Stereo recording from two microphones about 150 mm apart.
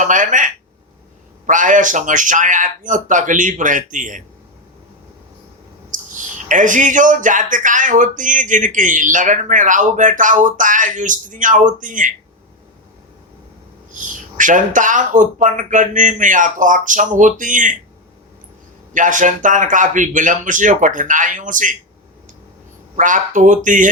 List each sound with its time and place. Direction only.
0.0 s speech: 60° right (ahead or behind)
5.9 s speech: 60° right (ahead or behind)
14.0 s speech: 60° right (ahead or behind)
18.9 s speech: 60° right (ahead or behind)
23.0 s speech: 60° right (ahead or behind)